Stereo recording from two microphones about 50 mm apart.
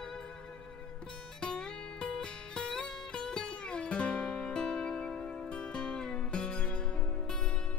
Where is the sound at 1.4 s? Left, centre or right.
Centre.